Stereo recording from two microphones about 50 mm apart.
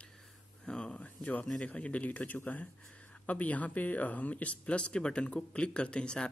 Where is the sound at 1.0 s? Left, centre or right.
Left.